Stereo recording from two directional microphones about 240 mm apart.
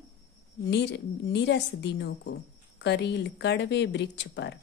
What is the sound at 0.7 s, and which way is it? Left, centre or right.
Speech, left.